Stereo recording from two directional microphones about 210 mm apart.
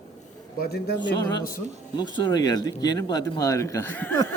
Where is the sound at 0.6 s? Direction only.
50° left (ahead or behind).